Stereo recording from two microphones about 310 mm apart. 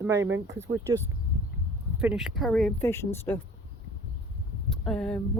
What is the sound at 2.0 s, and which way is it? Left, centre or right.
A woman's voice, centre.